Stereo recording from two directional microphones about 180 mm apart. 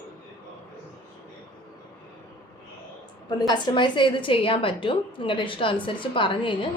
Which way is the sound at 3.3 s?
25° left (ahead or behind).